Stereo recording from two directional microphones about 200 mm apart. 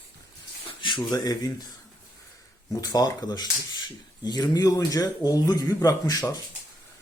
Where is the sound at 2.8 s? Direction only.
15° left (ahead or behind).